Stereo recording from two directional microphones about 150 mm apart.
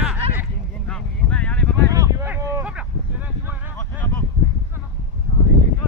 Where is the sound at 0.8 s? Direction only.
5° left (ahead or behind).